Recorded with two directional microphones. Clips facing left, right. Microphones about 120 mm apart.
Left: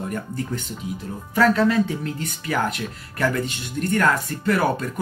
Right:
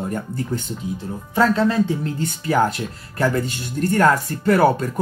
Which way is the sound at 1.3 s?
25° right (ahead or behind).